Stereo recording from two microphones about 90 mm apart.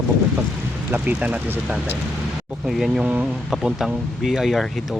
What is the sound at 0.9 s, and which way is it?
Speech, 20° right (ahead or behind).